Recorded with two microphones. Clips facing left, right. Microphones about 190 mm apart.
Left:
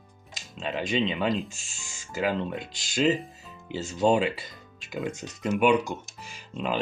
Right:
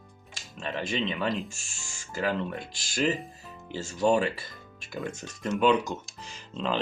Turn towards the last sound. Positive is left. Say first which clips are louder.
# even
turn(degrees=10)  # may be behind; listen again after turning